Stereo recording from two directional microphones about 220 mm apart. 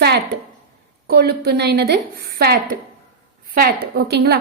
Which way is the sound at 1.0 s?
45° right (ahead or behind).